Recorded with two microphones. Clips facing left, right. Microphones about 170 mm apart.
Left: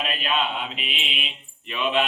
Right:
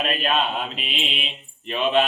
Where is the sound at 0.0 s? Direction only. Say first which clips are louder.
Right 4 dB; 45° right (ahead or behind).